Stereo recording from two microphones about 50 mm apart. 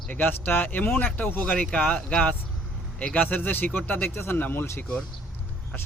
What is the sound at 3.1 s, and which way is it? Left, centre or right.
Speech, left.